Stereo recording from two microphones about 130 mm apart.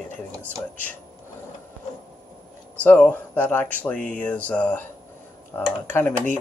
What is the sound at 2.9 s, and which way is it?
Speech, 10° left (ahead or behind).